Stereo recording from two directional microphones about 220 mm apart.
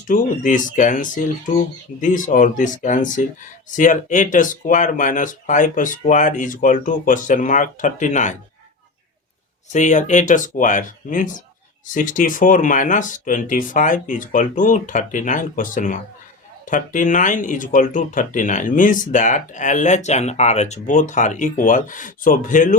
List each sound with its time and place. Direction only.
0.1 s speech: 35° left (ahead or behind)
9.7 s speech: 35° left (ahead or behind)